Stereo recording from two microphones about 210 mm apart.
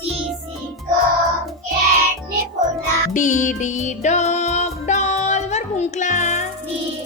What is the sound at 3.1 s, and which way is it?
Music, 35° left (ahead or behind).